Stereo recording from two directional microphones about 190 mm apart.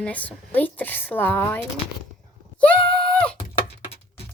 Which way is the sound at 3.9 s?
30° left (ahead or behind).